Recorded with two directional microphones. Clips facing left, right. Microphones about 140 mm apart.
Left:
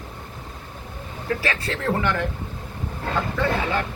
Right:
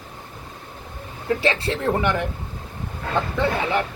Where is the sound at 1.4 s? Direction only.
25° right (ahead or behind).